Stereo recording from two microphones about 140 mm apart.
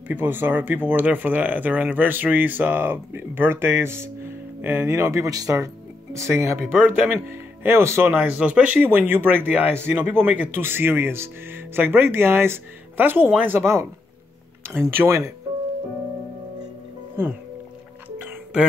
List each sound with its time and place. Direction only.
0.1 s speech: 15° right (ahead or behind)
15.0 s speech: 20° right (ahead or behind)